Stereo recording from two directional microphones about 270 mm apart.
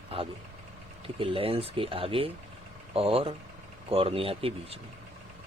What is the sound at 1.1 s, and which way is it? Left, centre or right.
Speech, centre.